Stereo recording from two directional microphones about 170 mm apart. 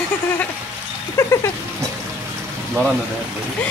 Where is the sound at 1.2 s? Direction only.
15° left (ahead or behind).